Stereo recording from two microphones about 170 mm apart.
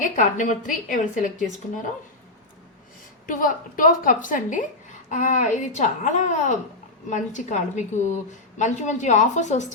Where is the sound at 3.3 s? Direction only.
55° left (ahead or behind).